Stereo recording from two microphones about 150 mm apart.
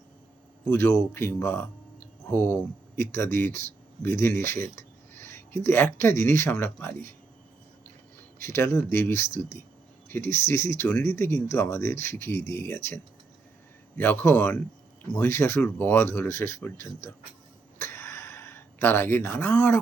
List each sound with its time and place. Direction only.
0.7 s speech: 15° left (ahead or behind)
8.4 s speech: 15° left (ahead or behind)
17.7 s a sound: 15° left (ahead or behind)